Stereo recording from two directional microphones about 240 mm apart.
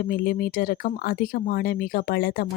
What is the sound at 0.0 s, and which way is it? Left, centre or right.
Speech, left.